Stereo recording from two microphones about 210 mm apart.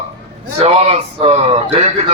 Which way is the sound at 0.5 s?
30° right (ahead or behind).